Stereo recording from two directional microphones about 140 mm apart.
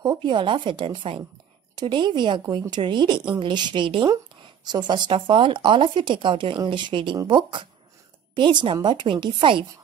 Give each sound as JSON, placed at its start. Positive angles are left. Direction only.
{"t": 0.0, "sound": "speech", "side_deg": -30}